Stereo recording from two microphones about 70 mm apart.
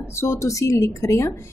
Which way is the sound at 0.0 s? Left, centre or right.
Left.